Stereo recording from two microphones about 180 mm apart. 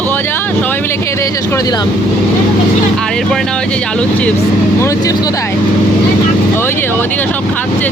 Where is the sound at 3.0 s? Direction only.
5° left (ahead or behind).